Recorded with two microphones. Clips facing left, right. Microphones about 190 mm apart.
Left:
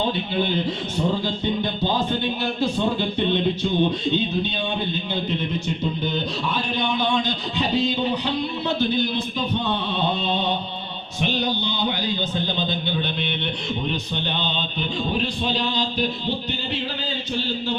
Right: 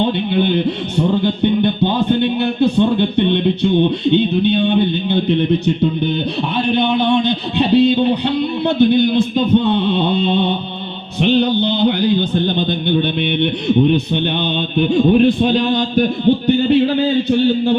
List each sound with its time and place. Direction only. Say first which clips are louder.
0.3 s speech: right 7 dB; 60° right (ahead or behind)